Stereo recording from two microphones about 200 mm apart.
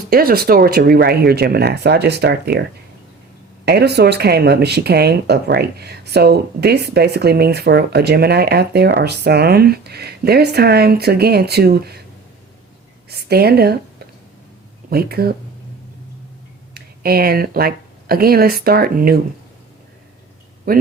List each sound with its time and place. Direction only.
0.1 s speech: 50° right (ahead or behind)
3.7 s speech: 55° right (ahead or behind)
13.1 s speech: 50° right (ahead or behind)
14.8 s speech: 50° right (ahead or behind)
16.7 s speech: 50° right (ahead or behind)
20.7 s speech: 50° right (ahead or behind)